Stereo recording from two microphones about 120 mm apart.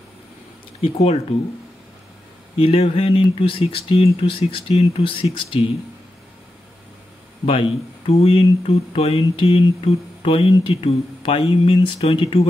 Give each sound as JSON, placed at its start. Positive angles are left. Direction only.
{"t": 0.7, "sound": "speech", "side_deg": 55}
{"t": 2.6, "sound": "speech", "side_deg": 55}
{"t": 7.4, "sound": "speech", "side_deg": 55}